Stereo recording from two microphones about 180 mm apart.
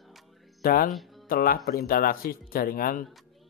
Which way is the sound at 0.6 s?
55° left (ahead or behind).